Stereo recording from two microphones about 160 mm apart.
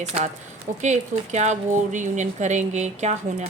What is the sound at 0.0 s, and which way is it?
Speech, 40° right (ahead or behind).